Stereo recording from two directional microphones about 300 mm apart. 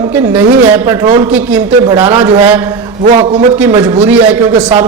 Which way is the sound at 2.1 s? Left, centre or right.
Centre.